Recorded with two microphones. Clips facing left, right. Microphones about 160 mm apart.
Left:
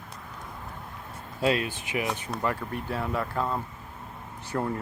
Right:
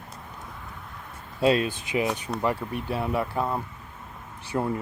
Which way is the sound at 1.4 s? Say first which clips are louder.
Right 4 dB; 30° right (ahead or behind).